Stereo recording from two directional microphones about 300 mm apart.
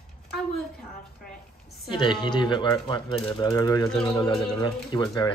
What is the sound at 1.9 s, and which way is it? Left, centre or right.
A woman's voice, centre.